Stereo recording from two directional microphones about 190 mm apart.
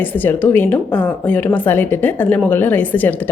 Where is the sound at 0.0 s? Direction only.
10° left (ahead or behind).